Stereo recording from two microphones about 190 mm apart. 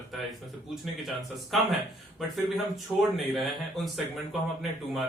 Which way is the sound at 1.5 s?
Centre (ahead or behind).